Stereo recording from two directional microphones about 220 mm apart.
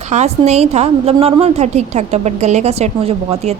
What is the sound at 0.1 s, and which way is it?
A woman's voice, 30° right (ahead or behind).